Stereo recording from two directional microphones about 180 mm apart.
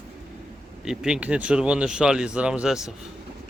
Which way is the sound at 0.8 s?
5° right (ahead or behind).